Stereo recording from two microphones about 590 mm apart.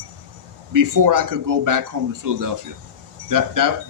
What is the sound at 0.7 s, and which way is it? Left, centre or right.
Speech, right.